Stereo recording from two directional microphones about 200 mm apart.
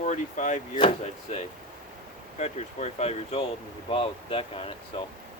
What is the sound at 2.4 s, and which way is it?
Speech, 35° left (ahead or behind).